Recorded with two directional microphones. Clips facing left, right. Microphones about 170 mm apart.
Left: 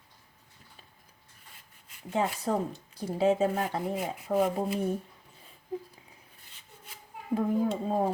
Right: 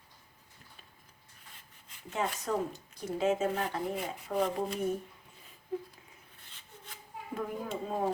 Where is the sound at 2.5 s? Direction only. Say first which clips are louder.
Left 3 dB; 35° left (ahead or behind).